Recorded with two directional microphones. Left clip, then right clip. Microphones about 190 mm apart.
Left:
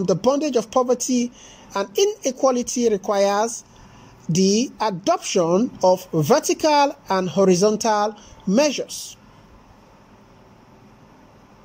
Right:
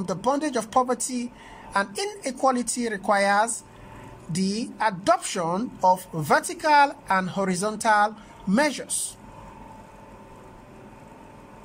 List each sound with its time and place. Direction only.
0.0 s a woman's voice: 10° left (ahead or behind)